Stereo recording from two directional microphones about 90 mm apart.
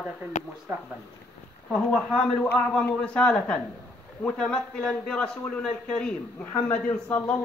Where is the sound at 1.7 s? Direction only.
10° left (ahead or behind).